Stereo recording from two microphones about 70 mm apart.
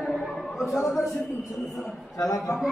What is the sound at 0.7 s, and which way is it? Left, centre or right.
Speech, left.